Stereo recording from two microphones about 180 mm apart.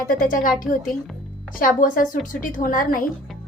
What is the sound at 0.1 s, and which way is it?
A woman's voice, 50° left (ahead or behind).